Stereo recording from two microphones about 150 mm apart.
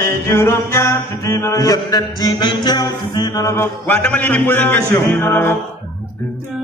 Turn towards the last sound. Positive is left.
turn(degrees=15)  # may be behind; listen again after turning